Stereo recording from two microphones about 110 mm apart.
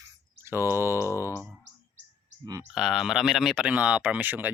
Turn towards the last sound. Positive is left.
turn(degrees=-15)  # may be behind; listen again after turning